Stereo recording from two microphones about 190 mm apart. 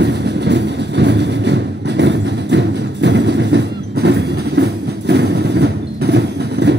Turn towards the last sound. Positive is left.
turn(degrees=-65)  # may be behind; listen again after turning